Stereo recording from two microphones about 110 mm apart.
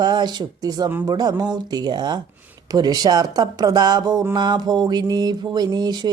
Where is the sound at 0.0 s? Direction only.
40° right (ahead or behind).